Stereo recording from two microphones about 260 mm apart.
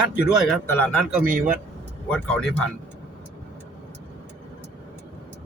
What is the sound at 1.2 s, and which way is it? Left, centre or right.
Speech, right.